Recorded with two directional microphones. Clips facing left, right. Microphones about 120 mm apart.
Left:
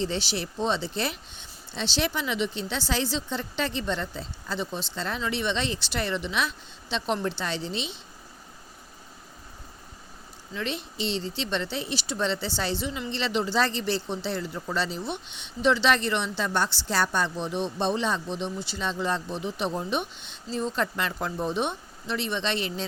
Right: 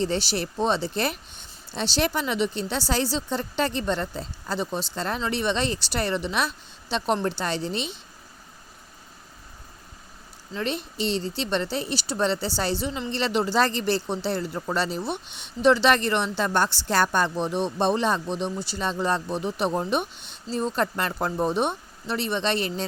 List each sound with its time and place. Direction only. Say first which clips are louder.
0.0 s speech: right 3 dB; 45° right (ahead or behind)
10.5 s speech: right 3 dB; 45° right (ahead or behind)